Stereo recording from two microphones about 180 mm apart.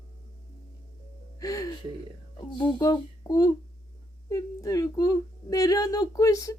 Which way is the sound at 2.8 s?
20° left (ahead or behind).